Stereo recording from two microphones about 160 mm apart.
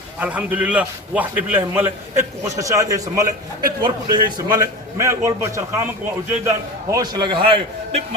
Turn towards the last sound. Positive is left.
turn(degrees=-30)  # may be behind; listen again after turning